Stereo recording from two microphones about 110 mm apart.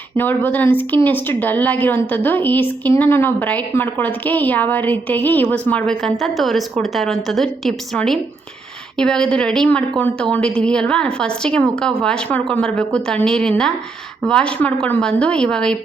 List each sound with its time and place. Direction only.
0.2 s a woman's voice: 15° left (ahead or behind)